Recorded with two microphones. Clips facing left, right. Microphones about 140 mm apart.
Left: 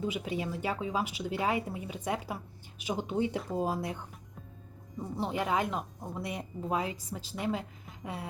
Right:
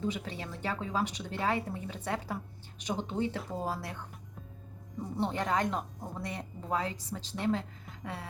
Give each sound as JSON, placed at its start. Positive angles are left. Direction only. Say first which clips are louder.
{"t": 0.0, "sound": "speech", "louder": "left 2 dB", "side_deg": 10}
{"t": 5.1, "sound": "speech", "louder": "even", "side_deg": 5}
{"t": 8.0, "sound": "a sound", "louder": "left 2 dB", "side_deg": 20}